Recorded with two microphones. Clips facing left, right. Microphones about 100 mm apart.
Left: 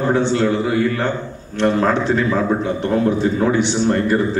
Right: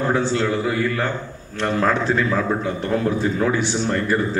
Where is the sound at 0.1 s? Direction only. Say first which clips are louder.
Left 6 dB; 25° left (ahead or behind).